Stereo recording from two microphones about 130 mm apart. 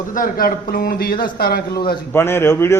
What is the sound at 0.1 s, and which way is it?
A man's voice, 90° left.